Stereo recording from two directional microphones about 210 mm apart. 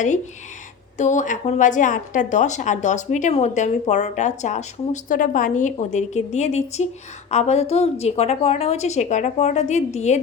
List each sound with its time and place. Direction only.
0.9 s a woman's voice: 35° left (ahead or behind)